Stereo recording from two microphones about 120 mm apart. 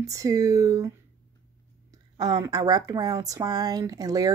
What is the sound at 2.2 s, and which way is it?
Speech, 30° right (ahead or behind).